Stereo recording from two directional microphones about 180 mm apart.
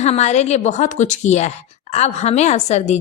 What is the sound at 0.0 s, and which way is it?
A woman's voice, 40° left (ahead or behind).